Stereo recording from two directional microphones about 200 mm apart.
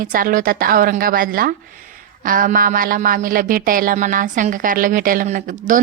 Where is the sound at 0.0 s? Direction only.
45° right (ahead or behind).